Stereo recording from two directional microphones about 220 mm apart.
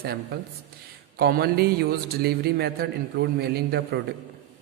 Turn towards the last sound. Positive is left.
turn(degrees=-50)  # may be behind; listen again after turning